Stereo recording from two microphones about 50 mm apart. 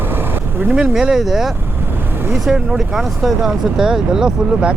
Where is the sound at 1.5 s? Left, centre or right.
Right.